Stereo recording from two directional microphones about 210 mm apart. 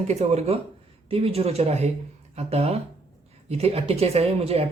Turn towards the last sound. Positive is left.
turn(degrees=-30)  # may be behind; listen again after turning